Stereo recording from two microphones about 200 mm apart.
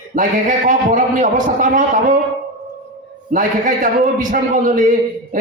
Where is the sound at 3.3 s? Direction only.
40° right (ahead or behind).